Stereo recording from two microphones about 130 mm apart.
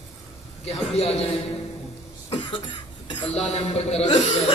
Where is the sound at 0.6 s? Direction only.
55° left (ahead or behind).